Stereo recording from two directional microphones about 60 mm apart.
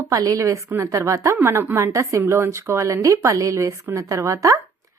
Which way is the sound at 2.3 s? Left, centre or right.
Right.